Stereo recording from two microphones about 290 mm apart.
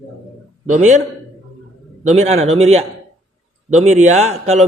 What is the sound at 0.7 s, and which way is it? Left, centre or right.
Speech, right.